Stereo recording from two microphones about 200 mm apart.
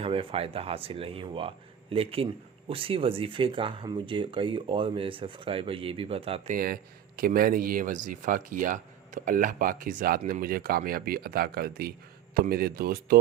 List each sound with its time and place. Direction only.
0.0 s speech: 25° right (ahead or behind)
7.2 s speech: 45° right (ahead or behind)